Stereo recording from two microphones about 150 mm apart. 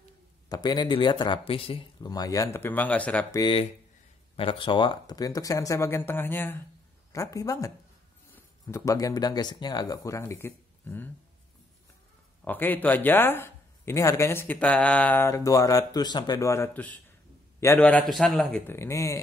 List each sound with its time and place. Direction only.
0.5 s speech: 25° left (ahead or behind); by 3.3 s 10° left (ahead or behind)
3.3 s speech: 25° left (ahead or behind)
4.4 s speech: 35° left (ahead or behind); by 11.1 s 15° left (ahead or behind)
12.4 s speech: 10° left (ahead or behind)
18.7 s speech: 20° left (ahead or behind)